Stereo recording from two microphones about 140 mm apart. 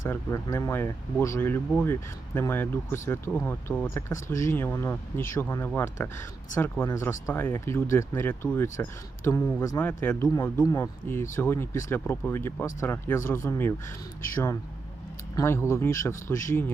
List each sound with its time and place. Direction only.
0.0 s speech: 20° left (ahead or behind)
15.4 s speech: 20° left (ahead or behind)